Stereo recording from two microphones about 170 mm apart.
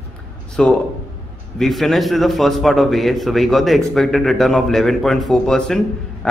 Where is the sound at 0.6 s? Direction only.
5° left (ahead or behind).